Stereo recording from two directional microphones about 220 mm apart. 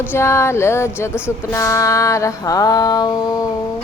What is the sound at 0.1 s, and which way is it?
A woman's voice, 10° left (ahead or behind).